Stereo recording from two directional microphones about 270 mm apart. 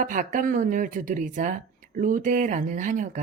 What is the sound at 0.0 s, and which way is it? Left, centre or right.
Speech, right.